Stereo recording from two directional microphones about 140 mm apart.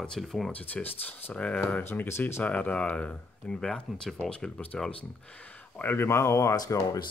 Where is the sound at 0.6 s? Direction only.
10° left (ahead or behind).